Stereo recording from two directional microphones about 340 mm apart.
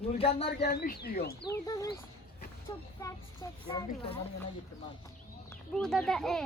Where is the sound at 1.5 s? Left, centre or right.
Centre.